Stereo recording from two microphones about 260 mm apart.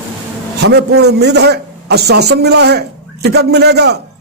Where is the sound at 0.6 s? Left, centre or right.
Right.